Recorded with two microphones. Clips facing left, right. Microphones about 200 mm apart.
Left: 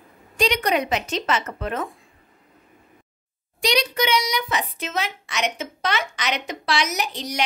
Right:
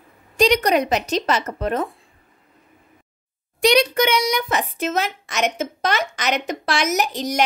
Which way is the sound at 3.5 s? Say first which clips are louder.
Right 6 dB; 55° right (ahead or behind).